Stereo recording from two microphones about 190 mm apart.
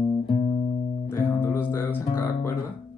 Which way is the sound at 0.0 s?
25° left (ahead or behind).